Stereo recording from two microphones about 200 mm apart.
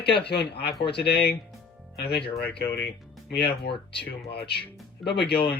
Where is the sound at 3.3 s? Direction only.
55° left (ahead or behind).